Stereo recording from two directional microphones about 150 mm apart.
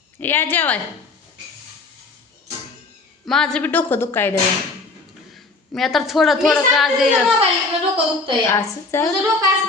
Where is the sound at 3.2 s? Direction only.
5° left (ahead or behind).